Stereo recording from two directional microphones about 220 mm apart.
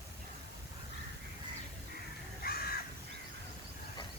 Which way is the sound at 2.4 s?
45° left (ahead or behind).